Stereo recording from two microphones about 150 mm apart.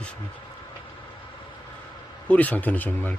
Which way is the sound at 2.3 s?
10° left (ahead or behind).